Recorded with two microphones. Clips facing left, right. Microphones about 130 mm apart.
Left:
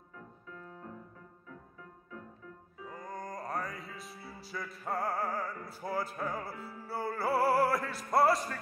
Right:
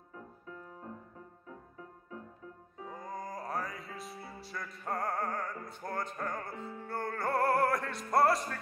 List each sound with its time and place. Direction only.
1.5 s music: 25° right (ahead or behind)
2.9 s music: centre (ahead or behind)